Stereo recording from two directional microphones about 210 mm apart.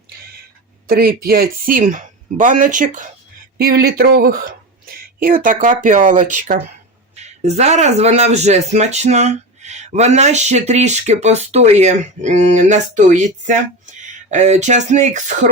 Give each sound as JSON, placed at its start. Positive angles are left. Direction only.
{"t": 0.9, "sound": "speech", "side_deg": -45}